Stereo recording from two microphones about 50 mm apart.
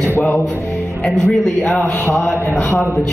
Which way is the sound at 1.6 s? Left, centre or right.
Left.